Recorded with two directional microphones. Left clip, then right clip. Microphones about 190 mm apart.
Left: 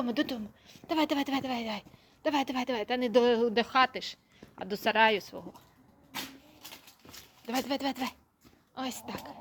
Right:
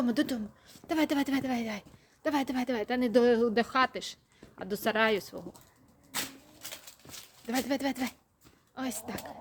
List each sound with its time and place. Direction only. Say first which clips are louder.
0.0 s a woman's voice: right 1 dB; 20° right (ahead or behind)
7.4 s a woman's voice: even; 15° right (ahead or behind)